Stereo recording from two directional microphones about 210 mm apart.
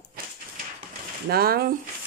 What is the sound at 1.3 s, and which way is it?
Speech, 45° right (ahead or behind).